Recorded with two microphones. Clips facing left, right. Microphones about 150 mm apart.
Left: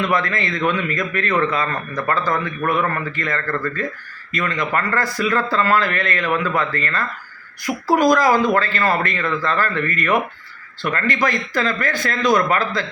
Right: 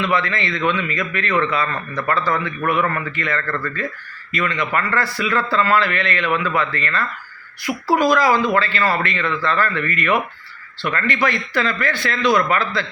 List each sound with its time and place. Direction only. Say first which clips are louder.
0.0 s a man's voice: even; 45° left (ahead or behind)